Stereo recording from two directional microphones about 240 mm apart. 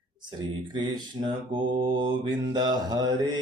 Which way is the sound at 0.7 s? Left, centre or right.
Centre.